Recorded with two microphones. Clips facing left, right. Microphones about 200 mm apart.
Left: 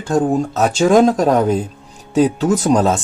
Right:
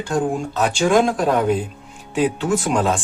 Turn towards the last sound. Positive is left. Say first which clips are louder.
# left 5 dB
turn(degrees=40)  # may be behind; listen again after turning